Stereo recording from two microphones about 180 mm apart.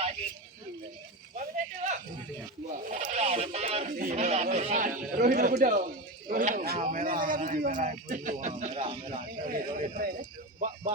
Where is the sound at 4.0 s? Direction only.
40° right (ahead or behind).